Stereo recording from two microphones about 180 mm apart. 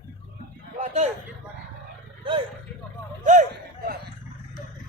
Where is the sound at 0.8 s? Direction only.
40° right (ahead or behind).